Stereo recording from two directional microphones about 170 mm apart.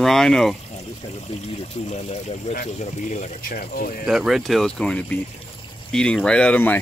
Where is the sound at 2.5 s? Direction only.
55° left (ahead or behind).